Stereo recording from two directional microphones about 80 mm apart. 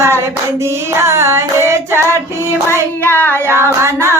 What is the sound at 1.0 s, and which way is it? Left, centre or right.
Singing, right.